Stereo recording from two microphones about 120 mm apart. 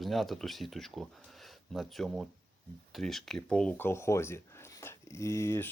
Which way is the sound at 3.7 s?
20° left (ahead or behind).